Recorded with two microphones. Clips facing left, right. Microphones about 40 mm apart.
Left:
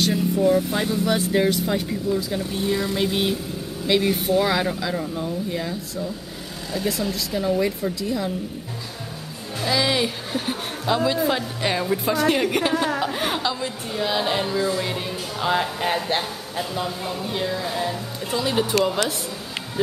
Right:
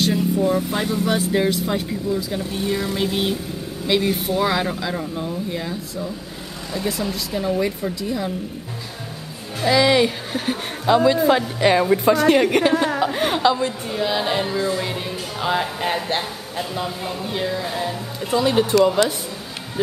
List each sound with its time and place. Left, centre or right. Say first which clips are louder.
0.0 s a woman's voice: right 1 dB; centre
9.6 s a woman's voice: right 6 dB; centre
12.0 s a woman's voice: right 5 dB; centre
13.4 s a woman's voice: right 8 dB; right
13.7 s speech: right 2 dB; centre